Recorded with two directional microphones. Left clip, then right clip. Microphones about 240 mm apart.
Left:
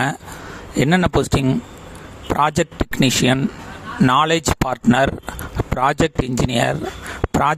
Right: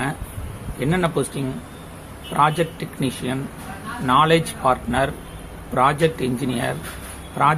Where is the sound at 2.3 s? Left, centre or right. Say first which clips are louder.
Left 1 dB; left.